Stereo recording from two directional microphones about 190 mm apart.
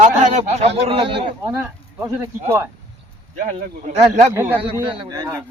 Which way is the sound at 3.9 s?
35° right (ahead or behind).